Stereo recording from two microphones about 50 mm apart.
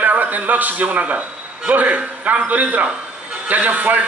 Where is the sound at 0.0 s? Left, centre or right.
Right.